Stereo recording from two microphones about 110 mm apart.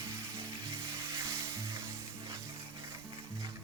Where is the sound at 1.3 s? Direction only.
25° right (ahead or behind).